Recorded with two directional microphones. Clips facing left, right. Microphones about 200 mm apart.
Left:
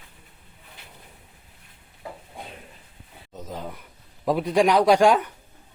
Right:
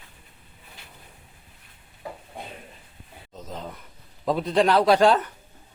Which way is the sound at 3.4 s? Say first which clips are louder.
Left 2 dB; 5° left (ahead or behind).